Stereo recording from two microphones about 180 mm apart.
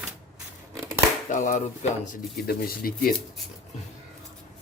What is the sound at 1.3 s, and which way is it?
Speech, 45° left (ahead or behind).